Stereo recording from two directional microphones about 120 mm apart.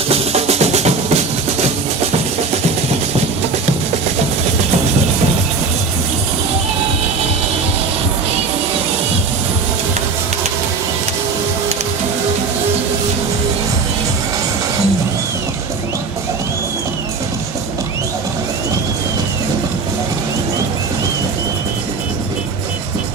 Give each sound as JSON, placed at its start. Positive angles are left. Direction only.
{"t": 0.1, "sound": "music", "side_deg": -60}